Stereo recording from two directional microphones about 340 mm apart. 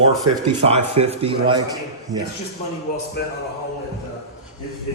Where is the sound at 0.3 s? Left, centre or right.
Right.